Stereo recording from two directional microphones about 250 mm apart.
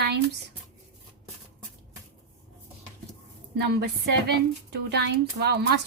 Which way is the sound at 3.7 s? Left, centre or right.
Right.